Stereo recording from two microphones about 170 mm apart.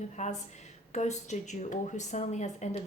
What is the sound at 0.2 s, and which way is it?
A woman's voice, 40° left (ahead or behind).